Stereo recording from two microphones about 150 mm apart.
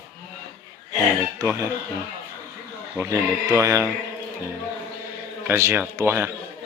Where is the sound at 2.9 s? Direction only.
20° right (ahead or behind).